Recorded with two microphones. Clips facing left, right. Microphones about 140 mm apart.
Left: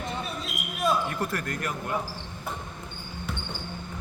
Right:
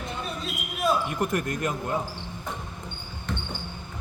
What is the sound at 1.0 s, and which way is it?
Speech, 20° right (ahead or behind).